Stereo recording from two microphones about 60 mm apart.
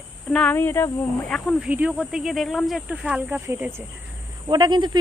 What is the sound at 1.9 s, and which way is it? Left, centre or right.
Speech, centre.